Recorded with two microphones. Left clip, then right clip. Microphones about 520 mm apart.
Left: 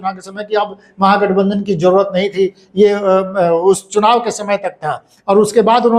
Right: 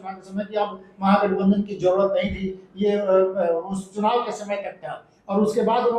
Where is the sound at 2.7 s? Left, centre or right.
Left.